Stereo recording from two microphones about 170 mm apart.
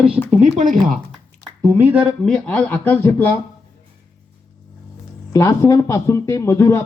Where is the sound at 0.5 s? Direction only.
50° right (ahead or behind).